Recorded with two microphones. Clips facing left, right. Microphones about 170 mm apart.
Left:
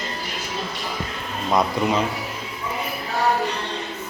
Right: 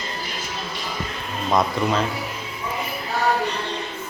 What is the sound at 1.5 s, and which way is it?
Speech, 15° left (ahead or behind).